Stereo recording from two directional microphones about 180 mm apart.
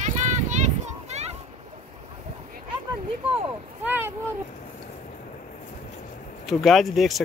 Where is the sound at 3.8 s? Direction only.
10° right (ahead or behind).